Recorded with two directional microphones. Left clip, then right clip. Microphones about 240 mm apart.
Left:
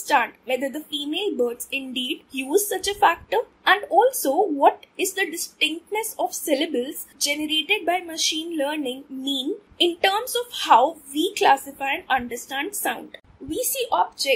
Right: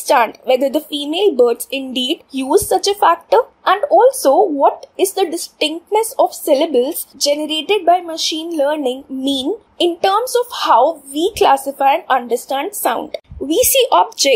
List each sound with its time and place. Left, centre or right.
0.0 s speech: right